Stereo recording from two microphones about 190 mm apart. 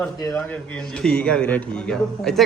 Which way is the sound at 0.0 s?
10° left (ahead or behind).